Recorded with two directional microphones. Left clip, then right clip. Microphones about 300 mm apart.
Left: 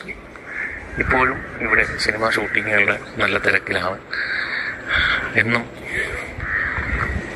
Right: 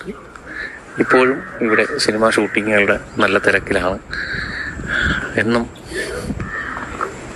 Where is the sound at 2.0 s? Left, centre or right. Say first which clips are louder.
Right 4 dB; right.